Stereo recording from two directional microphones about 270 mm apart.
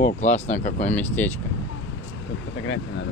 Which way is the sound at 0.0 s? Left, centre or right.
Left.